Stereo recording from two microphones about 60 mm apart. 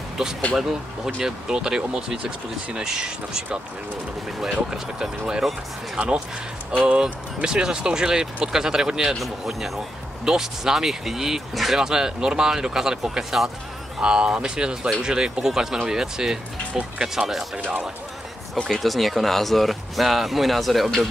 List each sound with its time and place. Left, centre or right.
0.2 s speech: centre
18.7 s speech: centre